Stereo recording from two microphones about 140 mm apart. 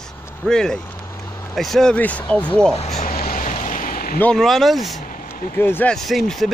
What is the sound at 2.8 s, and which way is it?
Speech, 55° left (ahead or behind).